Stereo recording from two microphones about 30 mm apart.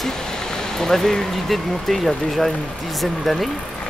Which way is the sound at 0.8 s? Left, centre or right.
Centre.